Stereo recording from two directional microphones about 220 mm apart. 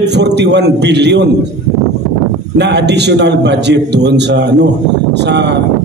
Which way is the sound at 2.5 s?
50° right (ahead or behind).